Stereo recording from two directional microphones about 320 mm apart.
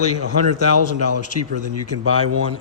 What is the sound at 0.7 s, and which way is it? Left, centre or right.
Speech, left.